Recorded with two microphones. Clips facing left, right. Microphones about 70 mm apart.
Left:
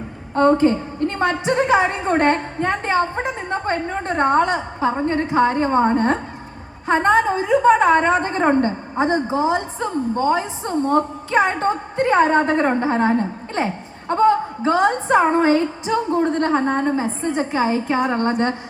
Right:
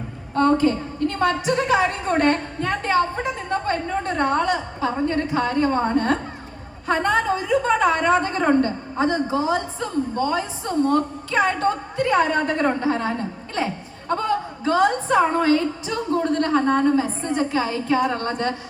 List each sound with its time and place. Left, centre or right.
0.3 s a woman's voice: left